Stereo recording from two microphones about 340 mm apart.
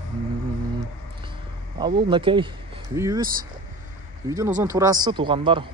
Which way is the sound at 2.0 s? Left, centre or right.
Centre.